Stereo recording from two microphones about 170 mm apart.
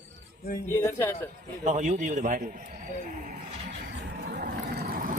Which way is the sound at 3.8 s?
85° right.